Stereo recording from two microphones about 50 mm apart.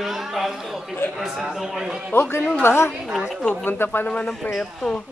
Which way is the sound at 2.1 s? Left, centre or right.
Left.